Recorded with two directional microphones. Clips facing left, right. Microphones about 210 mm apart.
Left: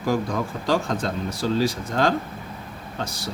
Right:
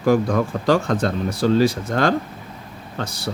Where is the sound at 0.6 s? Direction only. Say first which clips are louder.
Right 4 dB; 60° right (ahead or behind).